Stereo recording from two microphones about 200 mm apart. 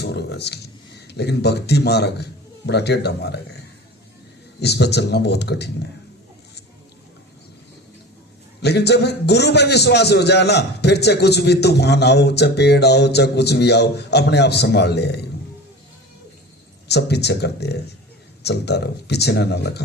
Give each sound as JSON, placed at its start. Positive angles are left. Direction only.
{"t": 0.0, "sound": "a sound", "side_deg": 55}
{"t": 1.0, "sound": "a man's voice", "side_deg": 55}
{"t": 4.6, "sound": "a man's voice", "side_deg": 55}
{"t": 8.6, "sound": "a man's voice", "side_deg": 55}
{"t": 16.9, "sound": "a man's voice", "side_deg": 55}